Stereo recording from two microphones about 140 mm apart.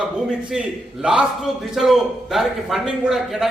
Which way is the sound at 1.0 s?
5° right (ahead or behind).